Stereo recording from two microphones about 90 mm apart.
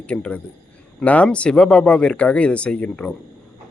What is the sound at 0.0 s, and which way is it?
A man's voice, 10° left (ahead or behind).